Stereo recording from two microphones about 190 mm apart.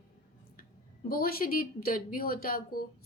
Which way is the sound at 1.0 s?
50° left (ahead or behind).